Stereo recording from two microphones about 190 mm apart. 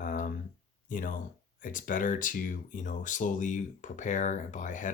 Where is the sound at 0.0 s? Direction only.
45° left (ahead or behind).